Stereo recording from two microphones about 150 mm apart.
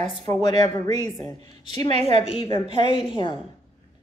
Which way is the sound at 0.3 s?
25° left (ahead or behind).